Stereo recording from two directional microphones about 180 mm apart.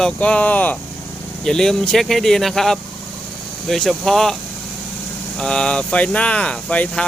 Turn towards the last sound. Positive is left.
turn(degrees=5)  # may be behind; listen again after turning